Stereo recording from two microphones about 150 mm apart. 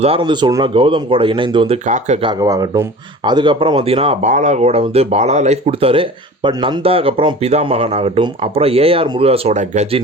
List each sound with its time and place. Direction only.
0.0 s speech: 35° right (ahead or behind)
2.2 s speech: 25° right (ahead or behind)
4.3 s speech: 55° right (ahead or behind)